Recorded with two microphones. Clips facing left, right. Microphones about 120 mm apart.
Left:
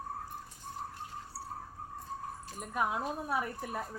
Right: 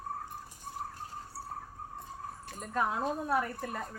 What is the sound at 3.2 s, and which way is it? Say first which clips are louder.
Speech: right 3 dB; 10° left (ahead or behind).